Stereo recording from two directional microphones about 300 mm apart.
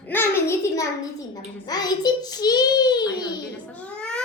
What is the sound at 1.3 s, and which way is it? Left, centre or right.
A child's voice, centre.